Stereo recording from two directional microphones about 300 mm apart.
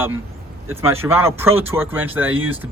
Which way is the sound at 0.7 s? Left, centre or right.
Centre.